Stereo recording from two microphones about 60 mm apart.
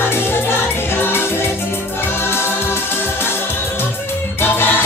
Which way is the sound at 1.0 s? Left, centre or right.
Left.